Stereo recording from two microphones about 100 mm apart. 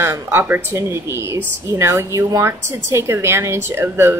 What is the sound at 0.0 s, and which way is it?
Speech, 25° right (ahead or behind).